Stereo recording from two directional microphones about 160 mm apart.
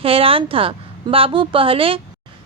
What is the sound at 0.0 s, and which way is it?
A woman's voice, 35° right (ahead or behind).